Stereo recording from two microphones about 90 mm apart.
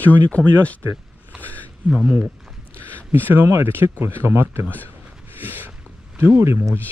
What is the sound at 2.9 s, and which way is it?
Speech, 20° right (ahead or behind).